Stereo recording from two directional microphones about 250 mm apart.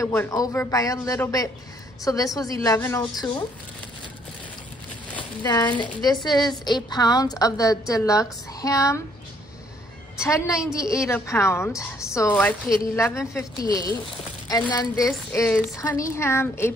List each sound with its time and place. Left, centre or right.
0.0 s a woman's voice: centre
5.4 s a woman's voice: centre
10.3 s a woman's voice: centre